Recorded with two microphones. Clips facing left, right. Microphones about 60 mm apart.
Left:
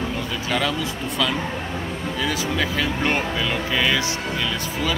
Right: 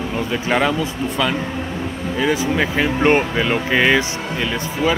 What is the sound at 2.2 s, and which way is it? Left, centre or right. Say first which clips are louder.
Speech: right 6 dB; right.